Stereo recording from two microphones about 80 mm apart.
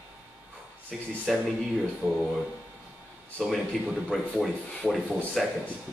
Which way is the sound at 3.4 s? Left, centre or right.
Centre.